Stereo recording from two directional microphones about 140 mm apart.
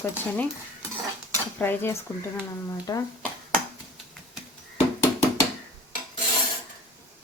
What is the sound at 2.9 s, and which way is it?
Speech, 30° left (ahead or behind).